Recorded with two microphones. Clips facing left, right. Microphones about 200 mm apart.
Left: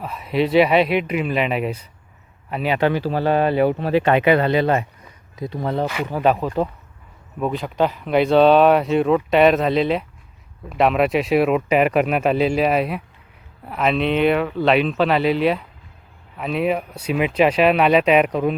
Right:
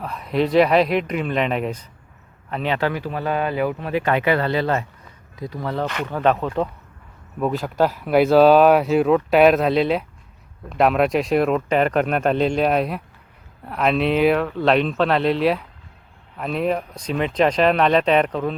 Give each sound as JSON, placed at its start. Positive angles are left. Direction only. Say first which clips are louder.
{"t": 0.0, "sound": "speech", "louder": "left 1 dB", "side_deg": 0}
{"t": 3.0, "sound": "speech", "louder": "left 5 dB", "side_deg": 30}
{"t": 5.8, "sound": "speech", "louder": "even", "side_deg": 10}